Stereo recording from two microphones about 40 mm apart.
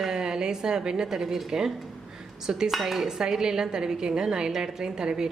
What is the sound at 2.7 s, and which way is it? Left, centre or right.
A woman's voice, centre.